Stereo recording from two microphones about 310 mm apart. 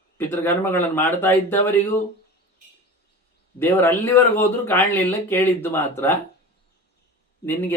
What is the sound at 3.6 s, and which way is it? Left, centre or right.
Speech, centre.